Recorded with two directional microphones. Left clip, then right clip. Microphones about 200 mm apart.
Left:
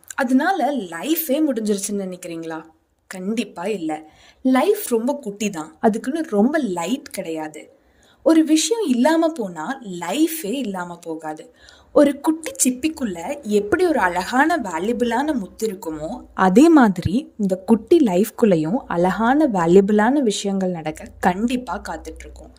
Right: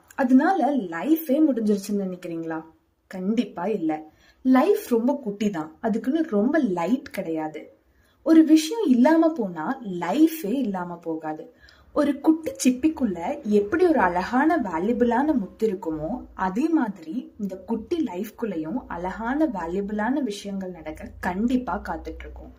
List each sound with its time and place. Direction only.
0.2 s a woman's voice: 45° left (ahead or behind)
8.2 s a woman's voice: 35° left (ahead or behind)